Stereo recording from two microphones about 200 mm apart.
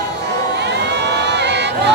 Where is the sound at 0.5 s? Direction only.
60° right (ahead or behind).